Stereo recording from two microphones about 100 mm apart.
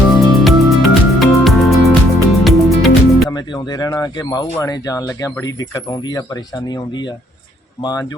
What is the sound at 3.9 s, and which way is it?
Bird, 35° left (ahead or behind).